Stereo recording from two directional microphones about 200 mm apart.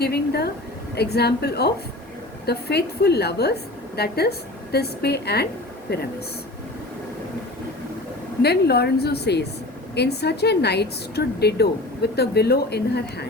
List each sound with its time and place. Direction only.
0.0 s a woman's voice: 55° left (ahead or behind)
8.4 s a woman's voice: 55° left (ahead or behind)